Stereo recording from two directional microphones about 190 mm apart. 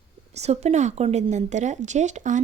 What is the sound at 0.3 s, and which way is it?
Speech, 35° right (ahead or behind).